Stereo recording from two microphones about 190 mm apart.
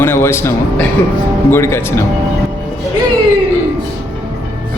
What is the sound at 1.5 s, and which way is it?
Speech, 15° left (ahead or behind).